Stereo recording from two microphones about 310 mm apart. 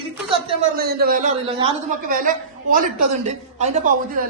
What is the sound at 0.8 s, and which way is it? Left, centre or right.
A man's voice, right.